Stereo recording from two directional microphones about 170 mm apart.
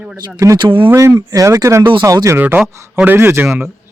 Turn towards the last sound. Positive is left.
turn(degrees=-10)  # may be behind; listen again after turning